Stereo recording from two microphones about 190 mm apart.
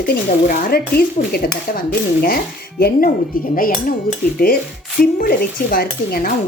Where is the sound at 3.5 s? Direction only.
45° left (ahead or behind).